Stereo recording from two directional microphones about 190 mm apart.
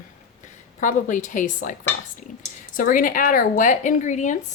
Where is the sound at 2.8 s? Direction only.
45° left (ahead or behind).